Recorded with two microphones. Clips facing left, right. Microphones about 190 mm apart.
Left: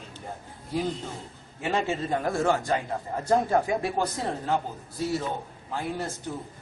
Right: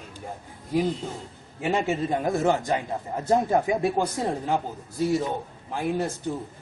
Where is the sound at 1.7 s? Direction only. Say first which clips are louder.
Right 2 dB; 15° right (ahead or behind).